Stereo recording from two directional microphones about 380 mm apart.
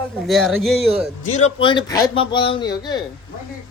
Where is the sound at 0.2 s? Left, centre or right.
Centre.